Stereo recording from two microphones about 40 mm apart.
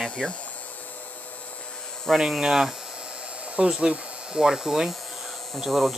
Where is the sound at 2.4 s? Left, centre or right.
Centre.